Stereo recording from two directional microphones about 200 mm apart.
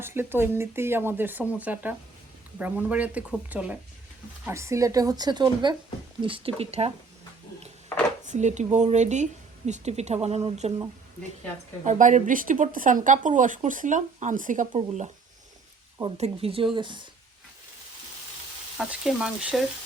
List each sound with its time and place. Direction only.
0.0 s speech: 10° right (ahead or behind); by 6.9 s 30° right (ahead or behind)
8.2 s speech: 35° right (ahead or behind)
11.9 s speech: 40° right (ahead or behind)
16.1 s speech: 30° right (ahead or behind)
18.8 s speech: 5° right (ahead or behind)